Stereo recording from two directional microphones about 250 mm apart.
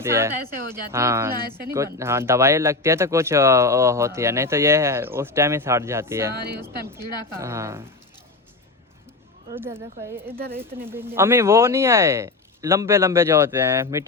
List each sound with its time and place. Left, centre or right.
0.0 s speech: centre
9.5 s speech: centre
10.3 s speech: right
10.6 s speech: centre